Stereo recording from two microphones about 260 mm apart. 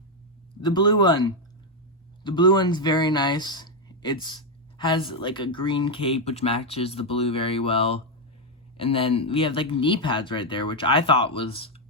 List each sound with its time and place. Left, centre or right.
0.6 s speech: centre